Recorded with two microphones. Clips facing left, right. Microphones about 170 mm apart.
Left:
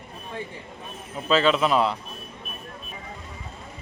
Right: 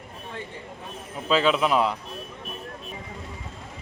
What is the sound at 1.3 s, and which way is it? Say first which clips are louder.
Speech: left 1 dB; 10° right (ahead or behind).